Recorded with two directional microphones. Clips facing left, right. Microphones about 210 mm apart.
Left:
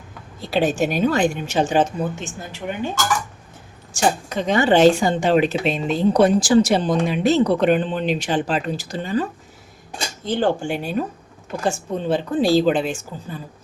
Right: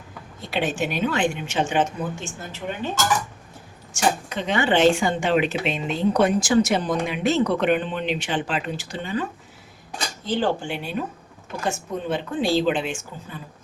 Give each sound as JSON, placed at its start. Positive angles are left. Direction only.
{"t": 0.4, "sound": "speech", "side_deg": 35}
{"t": 2.1, "sound": "a woman's voice", "side_deg": 15}
{"t": 3.9, "sound": "speech", "side_deg": 40}
{"t": 10.2, "sound": "speech", "side_deg": 50}
{"t": 11.6, "sound": "speech", "side_deg": 30}